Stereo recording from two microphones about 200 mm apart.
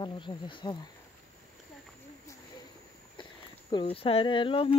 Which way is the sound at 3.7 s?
25° left (ahead or behind).